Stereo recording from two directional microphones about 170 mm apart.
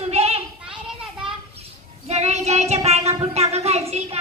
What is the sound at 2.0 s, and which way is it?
A child's voice, 40° right (ahead or behind).